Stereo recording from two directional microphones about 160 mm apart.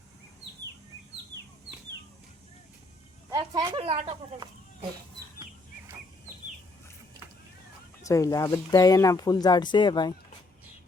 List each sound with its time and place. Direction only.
3.2 s a sound: 20° right (ahead or behind)
3.8 s speech: 40° right (ahead or behind)
8.0 s speech: 20° left (ahead or behind)